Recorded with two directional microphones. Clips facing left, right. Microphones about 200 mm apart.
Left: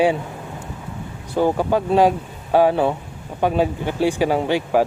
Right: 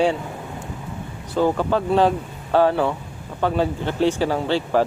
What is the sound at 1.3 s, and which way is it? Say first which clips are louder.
Speech: left 1 dB; 15° left (ahead or behind).